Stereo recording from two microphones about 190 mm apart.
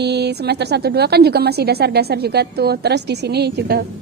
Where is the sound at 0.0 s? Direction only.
60° right (ahead or behind).